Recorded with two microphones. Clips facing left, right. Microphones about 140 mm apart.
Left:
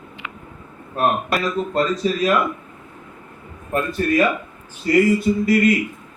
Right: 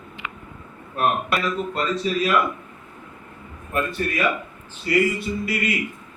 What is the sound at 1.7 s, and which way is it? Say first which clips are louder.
Speech: left 4 dB; 40° left (ahead or behind).